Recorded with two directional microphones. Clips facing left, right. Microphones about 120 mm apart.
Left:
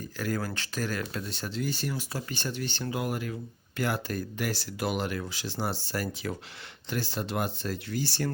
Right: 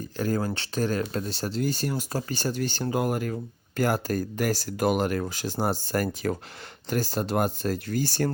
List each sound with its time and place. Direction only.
0.2 s speech: 25° right (ahead or behind); by 8.3 s 45° right (ahead or behind)